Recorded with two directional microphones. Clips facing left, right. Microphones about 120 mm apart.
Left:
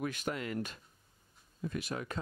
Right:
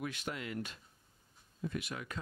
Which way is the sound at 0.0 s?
45° left (ahead or behind).